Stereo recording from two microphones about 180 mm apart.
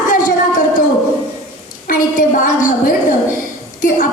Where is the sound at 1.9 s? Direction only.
50° left (ahead or behind).